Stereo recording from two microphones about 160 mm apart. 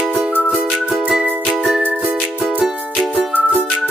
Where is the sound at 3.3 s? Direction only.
10° left (ahead or behind).